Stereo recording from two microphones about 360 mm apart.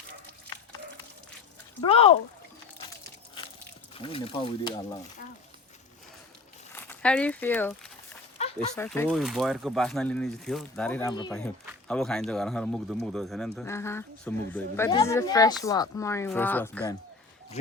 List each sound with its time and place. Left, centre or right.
1.8 s speech: centre
3.0 s a sound: centre
3.9 s speech: centre
6.7 s speech: centre
8.4 s a sound: centre
8.7 s a man's voice: centre